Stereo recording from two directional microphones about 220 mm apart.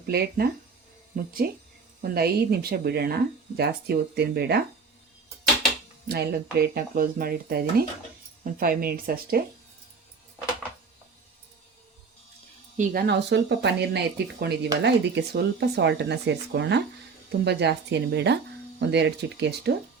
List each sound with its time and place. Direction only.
0.1 s speech: 45° right (ahead or behind)
6.1 s speech: 45° right (ahead or behind)
12.7 s speech: 40° right (ahead or behind)